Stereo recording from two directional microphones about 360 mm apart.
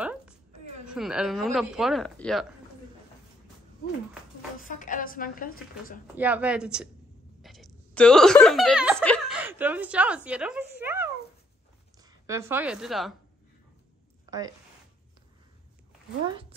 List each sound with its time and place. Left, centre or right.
0.0 s a sound: centre
0.8 s a woman's voice: centre
4.6 s a woman's voice: left
6.1 s a woman's voice: centre
16.3 s speech: centre